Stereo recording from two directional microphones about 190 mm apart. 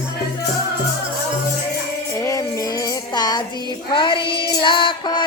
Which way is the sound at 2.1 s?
15° left (ahead or behind).